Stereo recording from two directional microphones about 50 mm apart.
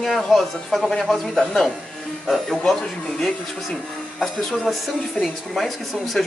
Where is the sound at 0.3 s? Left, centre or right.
Centre.